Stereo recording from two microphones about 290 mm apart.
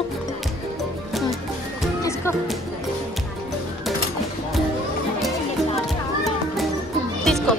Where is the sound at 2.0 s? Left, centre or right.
Centre.